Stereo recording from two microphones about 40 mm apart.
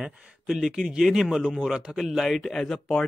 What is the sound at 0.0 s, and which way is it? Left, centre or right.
Speech, right.